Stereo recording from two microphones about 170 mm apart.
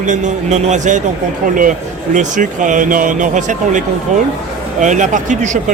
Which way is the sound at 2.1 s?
50° right (ahead or behind).